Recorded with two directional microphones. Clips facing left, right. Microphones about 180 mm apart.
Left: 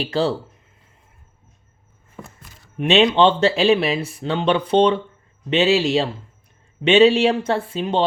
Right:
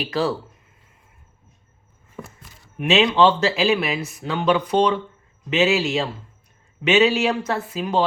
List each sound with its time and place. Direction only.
0.0 s speech: 25° left (ahead or behind)
2.7 s a man's voice: 30° left (ahead or behind)